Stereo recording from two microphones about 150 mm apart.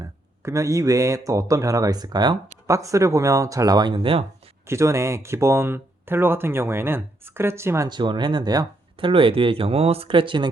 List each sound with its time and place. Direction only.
0.0 s speech: 20° right (ahead or behind)
4.6 s speech: 20° right (ahead or behind)
7.9 s speech: 30° right (ahead or behind)